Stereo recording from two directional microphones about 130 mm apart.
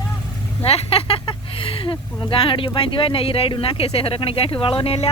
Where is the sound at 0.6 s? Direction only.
50° left (ahead or behind).